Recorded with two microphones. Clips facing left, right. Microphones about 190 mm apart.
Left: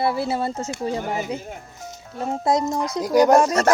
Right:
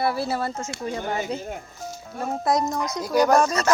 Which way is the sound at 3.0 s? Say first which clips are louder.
Left 4 dB; 15° left (ahead or behind).